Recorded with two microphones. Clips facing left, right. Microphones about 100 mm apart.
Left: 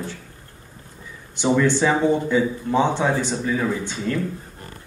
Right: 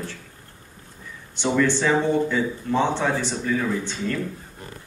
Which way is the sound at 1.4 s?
15° left (ahead or behind).